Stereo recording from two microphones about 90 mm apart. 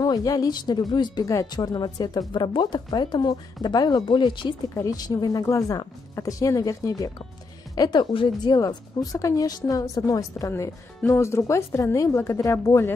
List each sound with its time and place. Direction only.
0.0 s speech: 45° left (ahead or behind)
1.2 s speech: 40° left (ahead or behind); by 4.6 s 65° left (ahead or behind)
4.7 s a woman's voice: 40° left (ahead or behind)
8.1 s speech: 75° left (ahead or behind)
8.5 s speech: 45° left (ahead or behind)
11.1 s a woman's voice: 30° left (ahead or behind)